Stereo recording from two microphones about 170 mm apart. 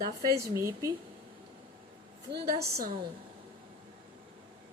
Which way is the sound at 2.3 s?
65° right (ahead or behind).